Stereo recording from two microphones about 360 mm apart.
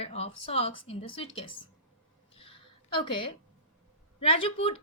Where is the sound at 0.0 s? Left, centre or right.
Centre.